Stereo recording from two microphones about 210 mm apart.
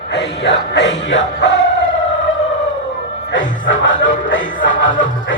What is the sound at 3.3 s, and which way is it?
Music, 60° left (ahead or behind).